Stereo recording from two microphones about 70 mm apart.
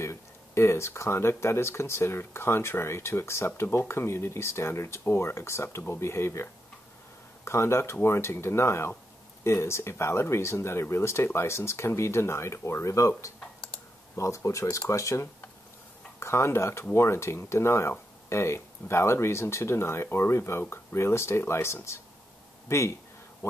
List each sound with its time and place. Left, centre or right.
0.0 s speech: left
13.4 s computer keyboard: centre
14.1 s speech: left